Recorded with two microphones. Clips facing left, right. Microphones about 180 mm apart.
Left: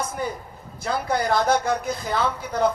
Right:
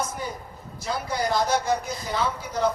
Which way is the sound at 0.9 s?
55° left (ahead or behind).